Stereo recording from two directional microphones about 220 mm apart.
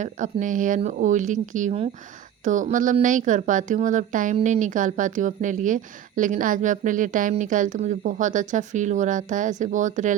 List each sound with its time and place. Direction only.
0.0 s speech: 35° right (ahead or behind)